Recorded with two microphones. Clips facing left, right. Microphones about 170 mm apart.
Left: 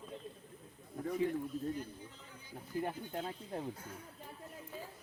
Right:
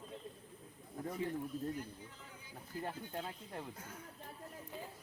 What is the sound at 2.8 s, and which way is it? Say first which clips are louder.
Speech: left 3 dB; 20° left (ahead or behind).